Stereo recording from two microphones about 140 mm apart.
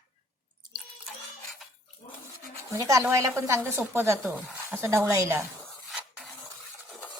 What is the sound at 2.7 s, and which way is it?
Speech, 20° right (ahead or behind).